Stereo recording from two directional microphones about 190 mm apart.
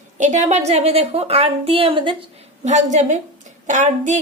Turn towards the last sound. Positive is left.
turn(degrees=-40)  # may be behind; listen again after turning